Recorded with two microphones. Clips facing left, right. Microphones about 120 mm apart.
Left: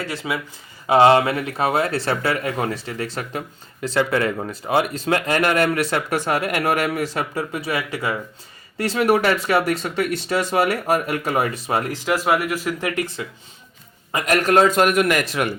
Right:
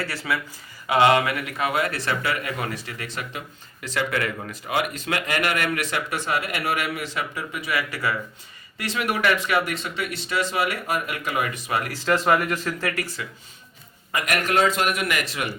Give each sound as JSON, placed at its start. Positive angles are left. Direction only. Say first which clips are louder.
{"t": 0.0, "sound": "speech", "louder": "left 1 dB", "side_deg": 20}
{"t": 0.9, "sound": "speech", "louder": "left 5 dB", "side_deg": 30}
{"t": 8.8, "sound": "speech", "louder": "left 7 dB", "side_deg": 35}
{"t": 11.9, "sound": "speech", "louder": "right 1 dB", "side_deg": 15}
{"t": 14.1, "sound": "a man's voice", "louder": "left 6 dB", "side_deg": 30}